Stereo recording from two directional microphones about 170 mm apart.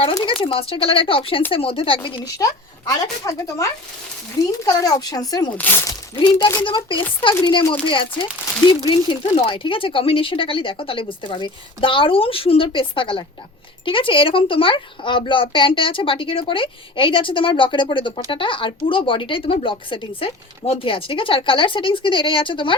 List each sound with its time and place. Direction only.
0.1 s a woman's voice: 25° left (ahead or behind)
5.5 s speech: 10° left (ahead or behind)
6.1 s a woman's voice: 25° left (ahead or behind)